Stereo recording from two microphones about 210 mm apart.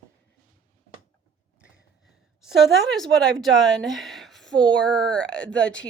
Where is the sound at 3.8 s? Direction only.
Centre (ahead or behind).